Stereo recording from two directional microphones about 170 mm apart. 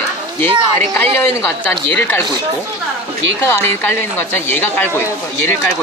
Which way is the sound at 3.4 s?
15° left (ahead or behind).